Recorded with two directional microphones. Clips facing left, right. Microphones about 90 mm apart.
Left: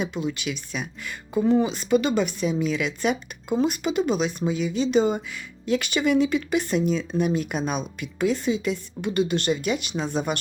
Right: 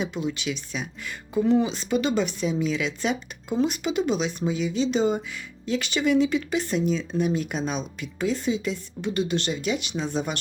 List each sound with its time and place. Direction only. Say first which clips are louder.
0.0 s speech: left 1 dB; 55° left (ahead or behind)